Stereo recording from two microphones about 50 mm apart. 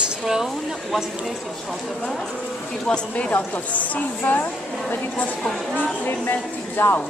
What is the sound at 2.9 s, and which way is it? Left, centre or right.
Speech, centre.